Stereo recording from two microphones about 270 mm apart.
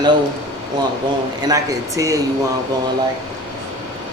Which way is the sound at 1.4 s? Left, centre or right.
Centre.